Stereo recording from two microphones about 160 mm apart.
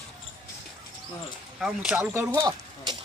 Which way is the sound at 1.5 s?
5° right (ahead or behind).